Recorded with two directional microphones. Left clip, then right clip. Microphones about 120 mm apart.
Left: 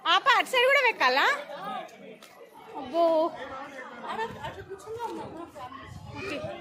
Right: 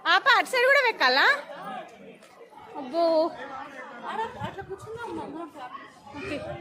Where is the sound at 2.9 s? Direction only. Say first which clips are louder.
Right 1 dB; 35° right (ahead or behind).